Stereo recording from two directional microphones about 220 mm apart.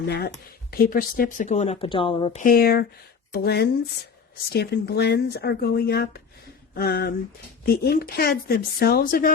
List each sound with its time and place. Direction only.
0.7 s speech: 40° left (ahead or behind); by 2.4 s 25° left (ahead or behind)
2.4 s speech: 40° left (ahead or behind)